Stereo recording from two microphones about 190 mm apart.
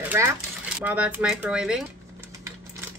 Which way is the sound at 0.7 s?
10° right (ahead or behind).